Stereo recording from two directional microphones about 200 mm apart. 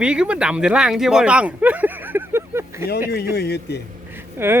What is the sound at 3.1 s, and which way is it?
Speech, 55° left (ahead or behind).